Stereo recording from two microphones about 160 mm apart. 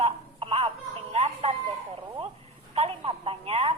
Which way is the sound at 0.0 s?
40° right (ahead or behind).